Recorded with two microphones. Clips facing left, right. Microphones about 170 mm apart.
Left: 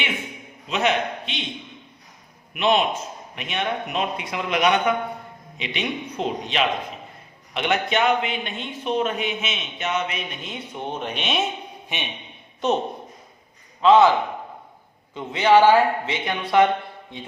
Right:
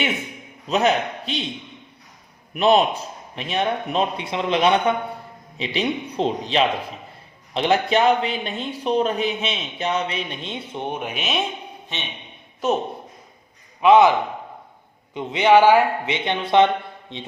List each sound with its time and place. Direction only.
0.7 s speech: 40° right (ahead or behind)
2.5 s speech: 35° right (ahead or behind); by 11.4 s centre (ahead or behind)
11.9 s a man's voice: 15° left (ahead or behind)
13.8 s a man's voice: 15° right (ahead or behind)
15.1 s a man's voice: 20° right (ahead or behind)